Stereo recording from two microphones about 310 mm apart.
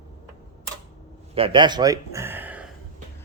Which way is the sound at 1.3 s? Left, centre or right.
Centre.